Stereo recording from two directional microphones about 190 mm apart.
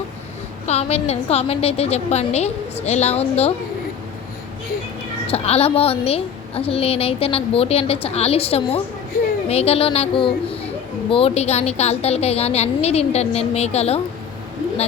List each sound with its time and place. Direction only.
0.7 s a woman's voice: 35° left (ahead or behind)
5.3 s a woman's voice: 30° left (ahead or behind)